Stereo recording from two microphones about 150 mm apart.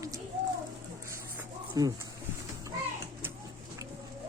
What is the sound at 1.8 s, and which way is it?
Speech, 25° right (ahead or behind).